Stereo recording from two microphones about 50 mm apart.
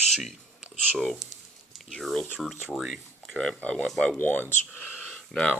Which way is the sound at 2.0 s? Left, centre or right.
Centre.